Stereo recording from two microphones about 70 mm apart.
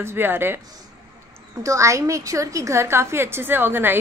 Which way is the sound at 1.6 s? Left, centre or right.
Right.